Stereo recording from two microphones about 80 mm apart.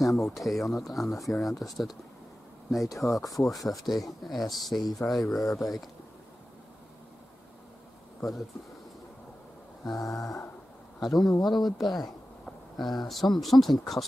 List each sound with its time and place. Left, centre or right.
0.0 s speech: centre
3.5 s a sound: left
3.8 s speech: centre
8.2 s speech: centre
9.9 s a sound: left
11.0 s speech: centre